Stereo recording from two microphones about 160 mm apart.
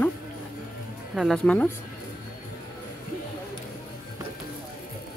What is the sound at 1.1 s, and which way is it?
Speech, centre (ahead or behind).